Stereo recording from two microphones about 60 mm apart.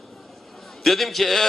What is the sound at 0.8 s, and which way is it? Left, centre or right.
Speech, centre.